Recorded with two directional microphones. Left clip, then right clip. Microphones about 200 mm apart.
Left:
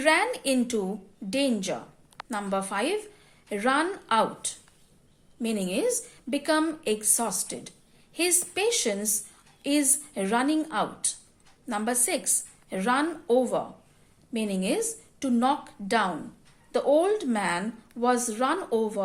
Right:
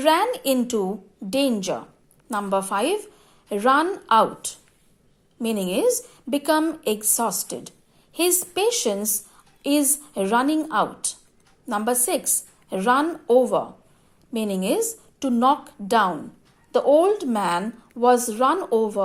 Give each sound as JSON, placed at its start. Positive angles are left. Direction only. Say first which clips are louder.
{"t": 0.0, "sound": "a woman's voice", "louder": "right 4 dB", "side_deg": -25}